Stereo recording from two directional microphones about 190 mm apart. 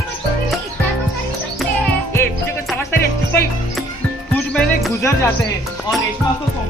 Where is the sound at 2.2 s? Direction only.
10° left (ahead or behind).